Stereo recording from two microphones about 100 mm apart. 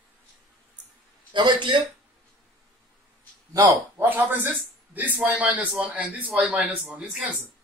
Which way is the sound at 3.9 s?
20° right (ahead or behind).